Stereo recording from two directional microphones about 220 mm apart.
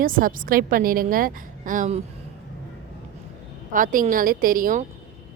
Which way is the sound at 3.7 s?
35° right (ahead or behind).